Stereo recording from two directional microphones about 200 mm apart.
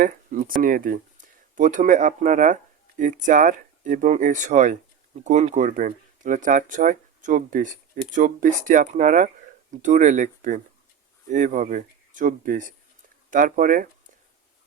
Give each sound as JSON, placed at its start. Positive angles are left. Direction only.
{"t": 0.0, "sound": "speech", "side_deg": -40}